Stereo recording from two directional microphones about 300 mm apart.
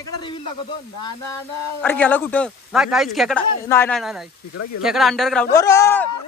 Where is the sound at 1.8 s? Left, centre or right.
Centre.